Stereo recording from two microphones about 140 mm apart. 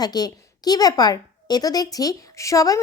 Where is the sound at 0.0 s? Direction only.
30° left (ahead or behind).